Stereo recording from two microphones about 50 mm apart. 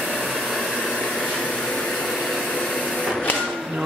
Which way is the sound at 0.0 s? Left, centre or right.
Centre.